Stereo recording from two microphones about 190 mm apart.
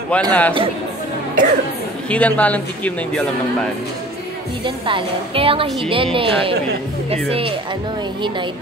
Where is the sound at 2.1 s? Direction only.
5° left (ahead or behind).